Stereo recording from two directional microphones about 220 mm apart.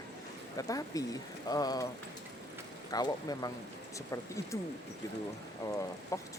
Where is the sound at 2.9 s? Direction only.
15° left (ahead or behind).